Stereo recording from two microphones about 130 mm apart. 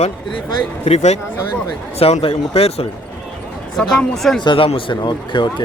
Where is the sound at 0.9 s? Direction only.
55° left (ahead or behind).